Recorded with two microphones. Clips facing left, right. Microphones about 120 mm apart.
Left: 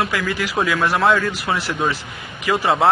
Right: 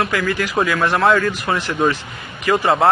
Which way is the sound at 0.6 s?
5° left (ahead or behind).